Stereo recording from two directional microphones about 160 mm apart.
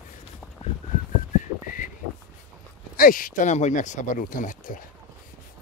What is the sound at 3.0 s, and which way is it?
Speech, 60° left (ahead or behind).